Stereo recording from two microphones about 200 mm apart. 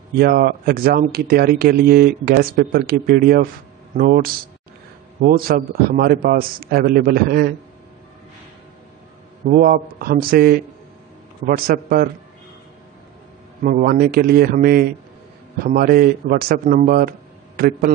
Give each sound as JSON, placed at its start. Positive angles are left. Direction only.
{"t": 0.2, "sound": "speech", "side_deg": -50}
{"t": 9.5, "sound": "speech", "side_deg": -45}
{"t": 13.6, "sound": "speech", "side_deg": -45}